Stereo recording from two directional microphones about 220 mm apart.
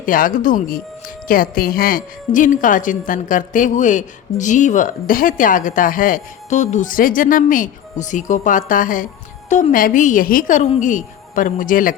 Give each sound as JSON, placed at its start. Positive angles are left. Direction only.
{"t": 0.0, "sound": "speech", "side_deg": 40}